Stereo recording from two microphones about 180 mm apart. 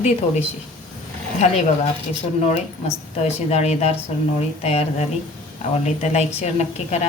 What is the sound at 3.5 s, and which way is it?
A woman's voice, 35° left (ahead or behind).